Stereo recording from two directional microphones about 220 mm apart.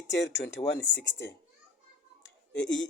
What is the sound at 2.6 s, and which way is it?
Speech, 55° left (ahead or behind).